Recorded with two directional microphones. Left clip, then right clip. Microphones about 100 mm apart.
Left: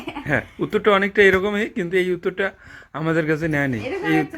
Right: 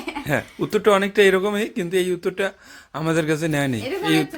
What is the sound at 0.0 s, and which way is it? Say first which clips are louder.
Speech: left 1 dB; 35° right (ahead or behind).